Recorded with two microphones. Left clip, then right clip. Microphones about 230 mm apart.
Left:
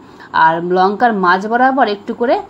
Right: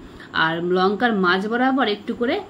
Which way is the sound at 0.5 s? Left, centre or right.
Centre.